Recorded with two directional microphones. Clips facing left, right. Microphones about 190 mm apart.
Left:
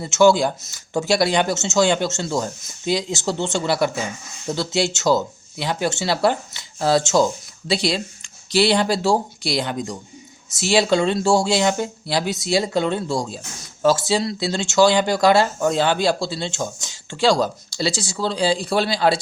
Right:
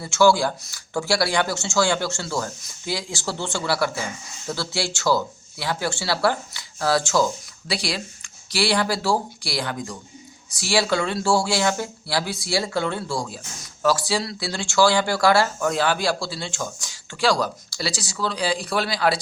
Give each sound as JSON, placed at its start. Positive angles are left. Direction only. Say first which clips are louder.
{"t": 0.0, "sound": "speech", "louder": "left 3 dB", "side_deg": 20}